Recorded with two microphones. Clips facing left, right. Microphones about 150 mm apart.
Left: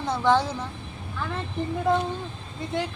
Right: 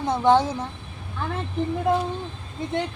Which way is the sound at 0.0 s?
20° right (ahead or behind).